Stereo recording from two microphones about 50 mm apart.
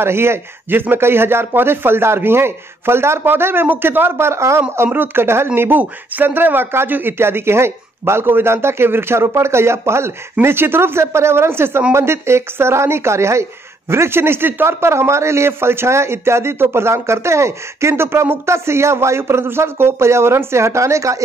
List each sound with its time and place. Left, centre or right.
0.0 s speech: right
10.4 s speech: right